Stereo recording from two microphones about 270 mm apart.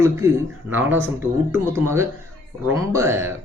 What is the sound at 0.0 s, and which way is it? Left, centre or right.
A man's voice, centre.